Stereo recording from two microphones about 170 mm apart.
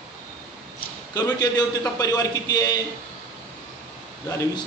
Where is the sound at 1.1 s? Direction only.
25° left (ahead or behind).